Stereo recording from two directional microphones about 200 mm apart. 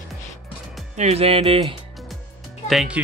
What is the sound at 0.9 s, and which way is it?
Speech, 35° right (ahead or behind).